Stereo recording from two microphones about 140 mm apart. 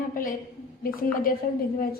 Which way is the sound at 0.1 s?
75° left (ahead or behind).